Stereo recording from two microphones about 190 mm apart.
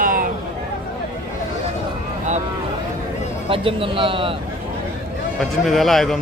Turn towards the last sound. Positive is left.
turn(degrees=0)  # may be behind; listen again after turning